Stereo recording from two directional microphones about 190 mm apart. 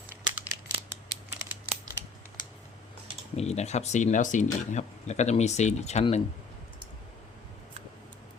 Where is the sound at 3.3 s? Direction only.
35° left (ahead or behind).